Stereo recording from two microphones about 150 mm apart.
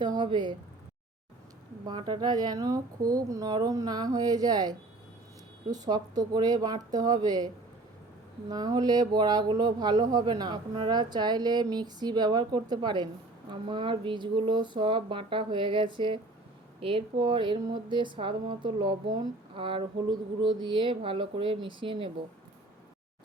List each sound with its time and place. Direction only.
0.0 s speech: 30° right (ahead or behind)
1.9 s speech: 30° right (ahead or behind)